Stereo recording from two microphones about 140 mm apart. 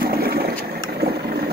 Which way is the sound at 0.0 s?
90° right.